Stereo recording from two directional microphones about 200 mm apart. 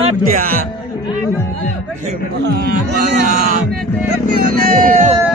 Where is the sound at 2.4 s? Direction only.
60° right (ahead or behind).